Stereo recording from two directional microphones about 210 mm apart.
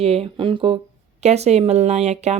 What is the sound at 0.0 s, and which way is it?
Speech, 30° right (ahead or behind).